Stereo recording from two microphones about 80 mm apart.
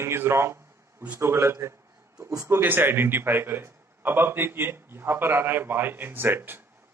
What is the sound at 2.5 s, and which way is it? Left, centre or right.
A man's voice, right.